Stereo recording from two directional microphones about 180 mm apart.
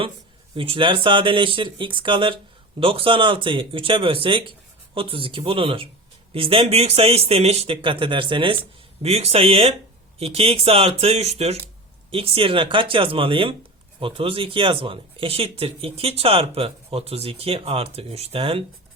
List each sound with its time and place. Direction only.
0.5 s speech: 30° right (ahead or behind)